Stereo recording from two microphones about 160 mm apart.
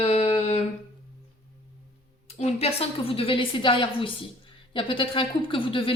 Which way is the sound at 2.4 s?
40° left (ahead or behind).